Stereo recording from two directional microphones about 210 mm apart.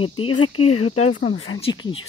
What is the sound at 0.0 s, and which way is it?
Speech, 25° left (ahead or behind).